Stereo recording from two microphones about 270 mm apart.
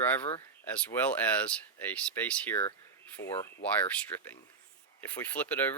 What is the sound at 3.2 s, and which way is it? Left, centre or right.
Speech, left.